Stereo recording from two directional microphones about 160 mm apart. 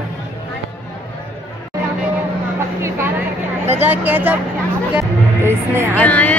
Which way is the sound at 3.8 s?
10° right (ahead or behind).